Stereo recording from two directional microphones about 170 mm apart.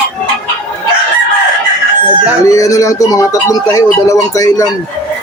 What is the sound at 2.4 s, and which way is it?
Speech, 20° left (ahead or behind).